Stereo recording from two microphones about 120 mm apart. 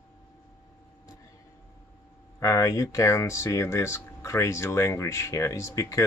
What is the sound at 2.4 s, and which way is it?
Speech, 30° left (ahead or behind).